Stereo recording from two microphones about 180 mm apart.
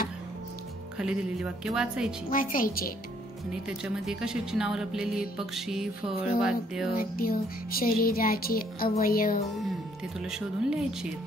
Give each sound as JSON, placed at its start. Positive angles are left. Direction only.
{"t": 0.9, "sound": "speech", "side_deg": -5}
{"t": 2.3, "sound": "music", "side_deg": 50}
{"t": 3.6, "sound": "speech", "side_deg": -5}
{"t": 7.0, "sound": "music", "side_deg": 55}
{"t": 10.6, "sound": "speech", "side_deg": -5}